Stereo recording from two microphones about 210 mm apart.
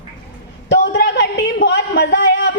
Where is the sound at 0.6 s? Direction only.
55° left (ahead or behind).